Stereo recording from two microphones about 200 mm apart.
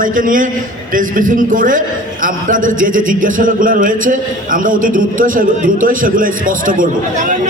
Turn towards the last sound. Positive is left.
turn(degrees=-40)  # may be behind; listen again after turning